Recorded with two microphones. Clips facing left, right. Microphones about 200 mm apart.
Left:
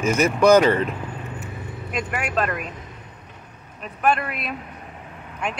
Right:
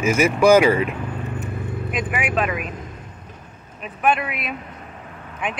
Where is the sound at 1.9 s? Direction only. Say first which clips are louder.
Right 1 dB; 5° right (ahead or behind).